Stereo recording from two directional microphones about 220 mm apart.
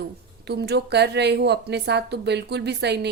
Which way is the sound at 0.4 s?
50° right (ahead or behind).